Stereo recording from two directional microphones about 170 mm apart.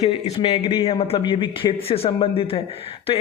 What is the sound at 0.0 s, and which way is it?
A man's voice, 35° left (ahead or behind).